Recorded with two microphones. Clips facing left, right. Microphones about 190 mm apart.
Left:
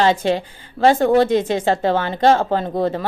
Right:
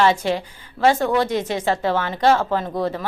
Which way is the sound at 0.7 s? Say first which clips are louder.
Left 4 dB; 45° left (ahead or behind).